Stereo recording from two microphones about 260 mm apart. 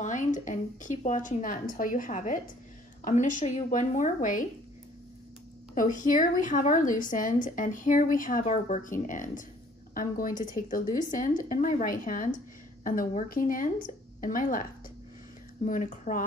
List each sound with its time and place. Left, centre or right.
0.0 s a woman's voice: left
5.8 s a woman's voice: left
15.6 s a woman's voice: left